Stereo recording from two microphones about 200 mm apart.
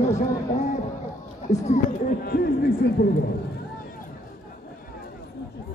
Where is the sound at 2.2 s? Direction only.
50° left (ahead or behind).